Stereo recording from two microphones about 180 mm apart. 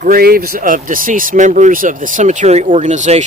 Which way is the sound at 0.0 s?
55° right (ahead or behind).